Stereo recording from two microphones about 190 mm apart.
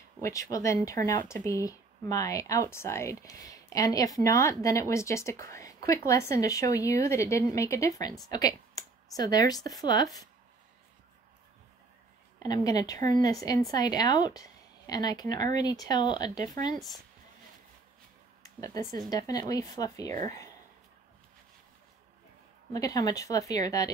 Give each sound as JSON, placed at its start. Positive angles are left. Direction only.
{"t": 0.2, "sound": "speech", "side_deg": 15}
{"t": 12.4, "sound": "speech", "side_deg": 20}
{"t": 18.4, "sound": "a sound", "side_deg": 20}
{"t": 19.0, "sound": "speech", "side_deg": 20}
{"t": 20.1, "sound": "speech", "side_deg": -40}
{"t": 22.7, "sound": "speech", "side_deg": 20}